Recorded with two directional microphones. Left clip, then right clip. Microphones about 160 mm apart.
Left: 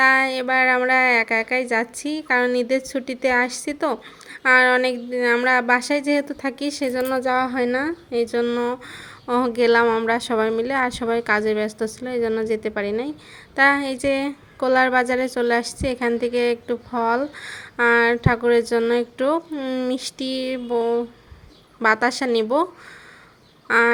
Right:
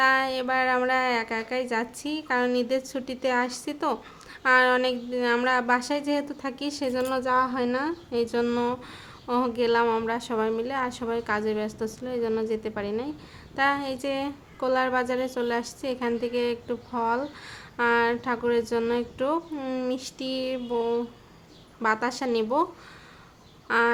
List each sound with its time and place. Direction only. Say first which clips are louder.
0.0 s speech: left 6 dB; 25° left (ahead or behind)
9.2 s a woman's voice: left 6 dB; 30° left (ahead or behind)
23.6 s fowl: left 6 dB; 30° left (ahead or behind)